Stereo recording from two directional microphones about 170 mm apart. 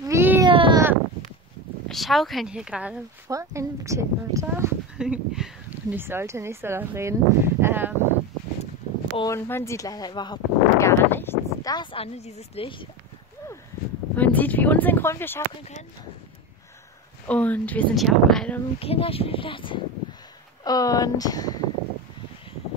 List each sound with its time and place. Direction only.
0.0 s baby cry: 15° right (ahead or behind)
0.5 s baby cry: 30° right (ahead or behind)
1.9 s speech: centre (ahead or behind)
3.3 s speech: 20° right (ahead or behind)
4.9 s speech: 5° right (ahead or behind)
9.2 s a sound: 15° left (ahead or behind)
11.7 s speech: 30° left (ahead or behind)
14.1 s speech: 10° left (ahead or behind)
17.3 s speech: 10° left (ahead or behind)
18.8 s speech: 35° left (ahead or behind)